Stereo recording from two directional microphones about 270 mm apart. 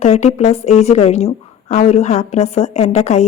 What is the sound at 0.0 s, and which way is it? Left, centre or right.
A woman's voice, left.